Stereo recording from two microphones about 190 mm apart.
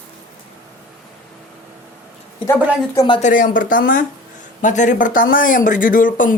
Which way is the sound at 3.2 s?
40° left (ahead or behind).